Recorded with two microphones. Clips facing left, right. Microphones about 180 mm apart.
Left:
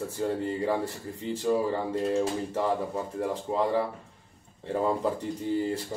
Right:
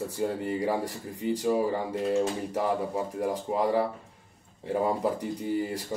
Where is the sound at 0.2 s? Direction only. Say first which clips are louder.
Even; 15° right (ahead or behind).